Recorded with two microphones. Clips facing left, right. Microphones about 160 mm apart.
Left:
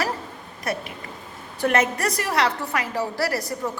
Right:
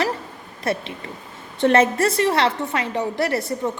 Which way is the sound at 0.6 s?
25° right (ahead or behind).